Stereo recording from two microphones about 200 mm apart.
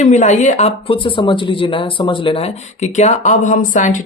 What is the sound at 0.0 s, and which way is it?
Speech, 35° left (ahead or behind).